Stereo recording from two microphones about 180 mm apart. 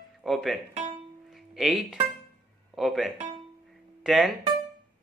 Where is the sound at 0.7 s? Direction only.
40° right (ahead or behind).